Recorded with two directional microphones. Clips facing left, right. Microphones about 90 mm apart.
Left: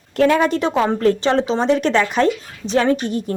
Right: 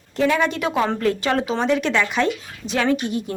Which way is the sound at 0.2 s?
45° left (ahead or behind).